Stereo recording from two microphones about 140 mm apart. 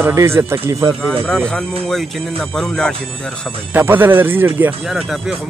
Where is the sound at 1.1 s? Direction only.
5° left (ahead or behind).